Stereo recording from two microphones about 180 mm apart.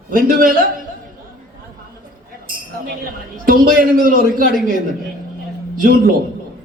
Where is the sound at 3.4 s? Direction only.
50° right (ahead or behind).